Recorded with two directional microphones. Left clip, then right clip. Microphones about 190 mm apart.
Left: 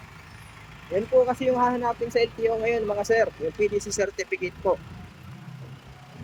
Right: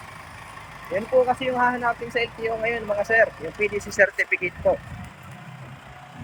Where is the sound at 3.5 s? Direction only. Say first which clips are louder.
Even; 40° right (ahead or behind).